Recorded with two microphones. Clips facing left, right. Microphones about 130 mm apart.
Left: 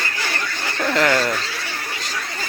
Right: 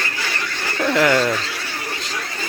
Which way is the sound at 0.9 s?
10° right (ahead or behind).